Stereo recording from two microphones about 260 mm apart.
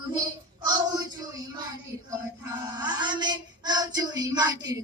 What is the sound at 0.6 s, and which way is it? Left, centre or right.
Child singing, centre.